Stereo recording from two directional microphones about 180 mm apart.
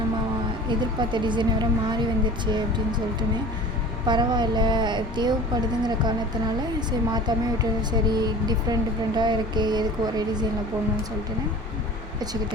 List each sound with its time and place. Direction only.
0.7 s speech: 25° right (ahead or behind)
4.0 s speech: 25° right (ahead or behind)